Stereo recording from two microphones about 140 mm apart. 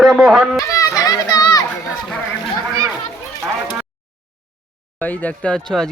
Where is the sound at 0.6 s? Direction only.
20° left (ahead or behind).